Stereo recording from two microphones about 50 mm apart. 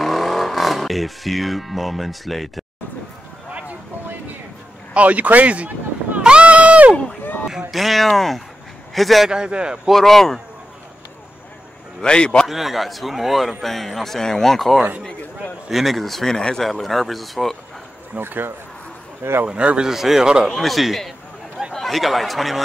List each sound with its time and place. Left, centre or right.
0.0 s speech: centre
4.9 s a man's voice: right
6.2 s run: right
7.7 s a man's voice: centre
9.3 s speech: centre
9.9 s speech: centre
12.0 s speech: centre
12.4 s a man's voice: centre
16.6 s a man's voice: centre
18.2 s speech: right
19.4 s a man's voice: right
19.9 s speech: centre
20.4 s a man's voice: centre